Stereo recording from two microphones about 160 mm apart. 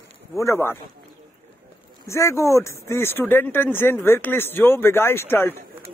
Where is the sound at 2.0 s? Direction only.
15° left (ahead or behind).